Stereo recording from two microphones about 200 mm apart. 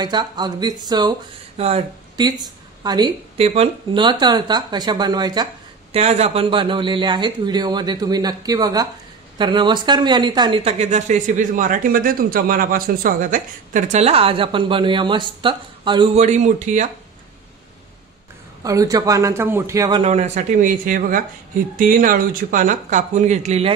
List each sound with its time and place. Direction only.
0.0 s speech: 20° right (ahead or behind)
5.9 s speech: 35° right (ahead or behind)
18.6 s a man's voice: 15° right (ahead or behind)
20.0 s speech: 35° right (ahead or behind)